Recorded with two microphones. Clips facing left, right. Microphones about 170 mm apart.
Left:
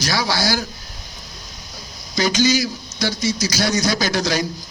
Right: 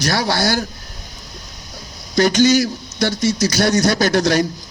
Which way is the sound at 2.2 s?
60° right (ahead or behind).